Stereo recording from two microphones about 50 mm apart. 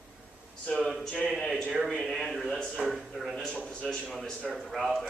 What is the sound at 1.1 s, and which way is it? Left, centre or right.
A man's voice, centre.